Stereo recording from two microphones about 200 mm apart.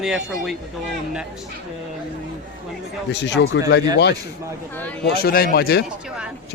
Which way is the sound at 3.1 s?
60° left (ahead or behind).